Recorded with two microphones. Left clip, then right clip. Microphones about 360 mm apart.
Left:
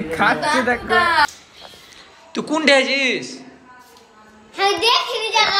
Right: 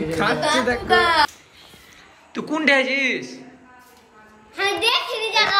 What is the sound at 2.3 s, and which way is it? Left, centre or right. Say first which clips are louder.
A man's voice: left 3 dB; centre.